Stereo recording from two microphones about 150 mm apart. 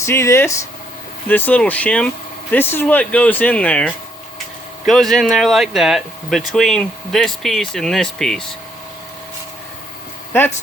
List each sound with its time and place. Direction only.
0.0 s speech: 20° left (ahead or behind)
4.9 s speech: centre (ahead or behind)